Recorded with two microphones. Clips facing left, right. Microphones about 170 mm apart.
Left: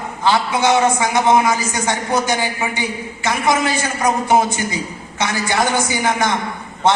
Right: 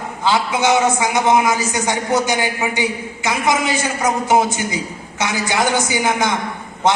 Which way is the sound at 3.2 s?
15° right (ahead or behind).